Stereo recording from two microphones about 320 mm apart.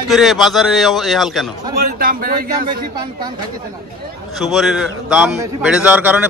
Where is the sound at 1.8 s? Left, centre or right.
Right.